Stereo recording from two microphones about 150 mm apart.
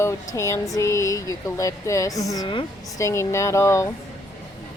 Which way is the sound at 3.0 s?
20° left (ahead or behind).